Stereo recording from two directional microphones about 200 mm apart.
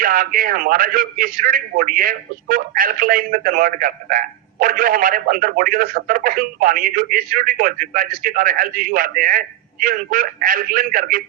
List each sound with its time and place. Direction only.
0.0 s a man's voice: 45° right (ahead or behind)